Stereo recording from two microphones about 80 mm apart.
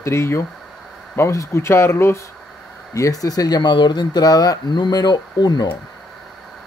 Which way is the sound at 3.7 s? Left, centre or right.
Left.